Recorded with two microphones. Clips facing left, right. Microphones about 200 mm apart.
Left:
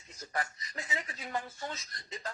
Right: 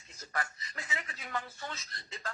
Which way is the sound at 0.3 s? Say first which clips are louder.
Left 1 dB; 25° left (ahead or behind).